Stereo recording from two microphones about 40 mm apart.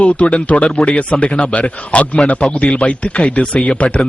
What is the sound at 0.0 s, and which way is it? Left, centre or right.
A man's voice, left.